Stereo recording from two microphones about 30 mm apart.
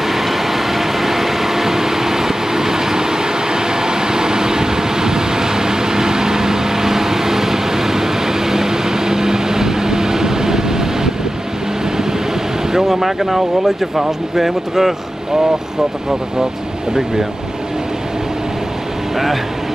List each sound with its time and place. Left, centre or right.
0.1 s vehicle: centre
12.8 s speech: centre